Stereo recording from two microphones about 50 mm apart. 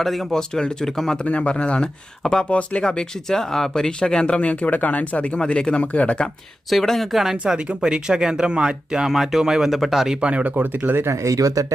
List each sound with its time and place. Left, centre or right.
0.0 s speech: centre
1.2 s speech: left
4.4 s speech: left
6.7 s speech: centre
9.0 s speech: centre
10.2 s speech: right
10.4 s speech: right
11.1 s speech: right